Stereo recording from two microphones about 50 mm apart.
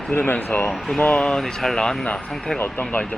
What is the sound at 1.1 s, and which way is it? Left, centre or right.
Speech, centre.